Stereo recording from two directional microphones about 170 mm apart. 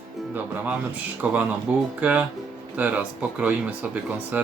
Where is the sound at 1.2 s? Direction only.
5° right (ahead or behind).